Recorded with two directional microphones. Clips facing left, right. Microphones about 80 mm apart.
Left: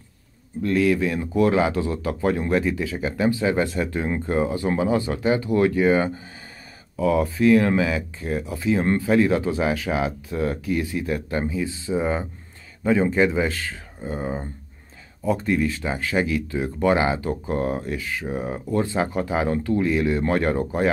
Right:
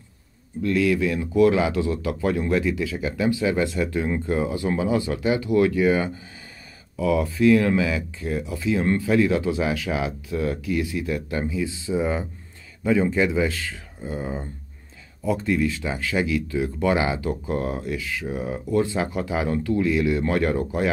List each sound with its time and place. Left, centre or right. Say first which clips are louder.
0.6 s speech: left 1 dB; left